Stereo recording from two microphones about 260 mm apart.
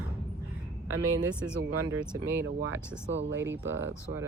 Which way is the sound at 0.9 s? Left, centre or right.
Right.